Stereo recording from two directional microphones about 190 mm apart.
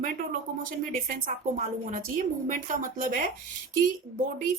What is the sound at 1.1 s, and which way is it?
A woman's voice, 45° right (ahead or behind).